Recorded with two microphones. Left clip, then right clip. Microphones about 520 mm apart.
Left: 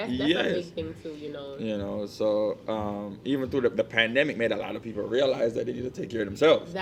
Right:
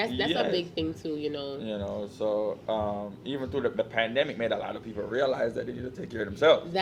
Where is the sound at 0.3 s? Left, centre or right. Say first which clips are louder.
Left 6 dB; left.